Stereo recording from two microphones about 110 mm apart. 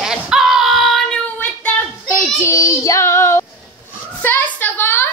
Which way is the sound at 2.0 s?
25° left (ahead or behind).